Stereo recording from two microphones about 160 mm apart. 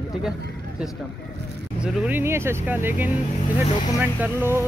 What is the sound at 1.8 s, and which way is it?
Speech, 10° right (ahead or behind).